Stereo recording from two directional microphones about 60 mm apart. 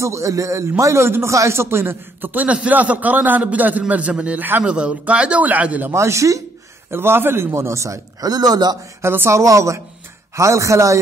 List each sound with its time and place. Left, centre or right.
0.0 s speech: right
2.4 s a man's voice: centre
5.9 s speech: right
6.9 s speech: right
9.0 s speech: right
9.4 s speech: right